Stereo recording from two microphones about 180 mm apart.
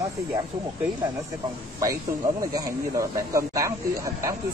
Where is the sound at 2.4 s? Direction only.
20° right (ahead or behind).